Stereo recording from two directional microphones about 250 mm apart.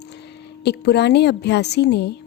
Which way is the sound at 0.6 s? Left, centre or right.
Left.